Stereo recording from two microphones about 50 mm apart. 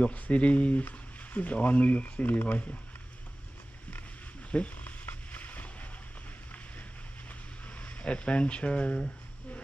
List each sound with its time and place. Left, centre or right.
0.0 s speech: left
4.5 s a sound: left
7.6 s speech: left